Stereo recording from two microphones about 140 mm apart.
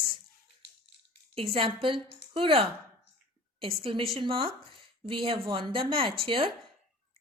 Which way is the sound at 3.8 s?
40° right (ahead or behind).